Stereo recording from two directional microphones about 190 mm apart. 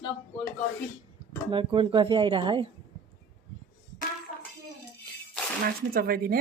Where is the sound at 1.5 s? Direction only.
25° right (ahead or behind).